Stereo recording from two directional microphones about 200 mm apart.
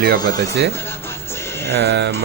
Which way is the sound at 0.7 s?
10° left (ahead or behind).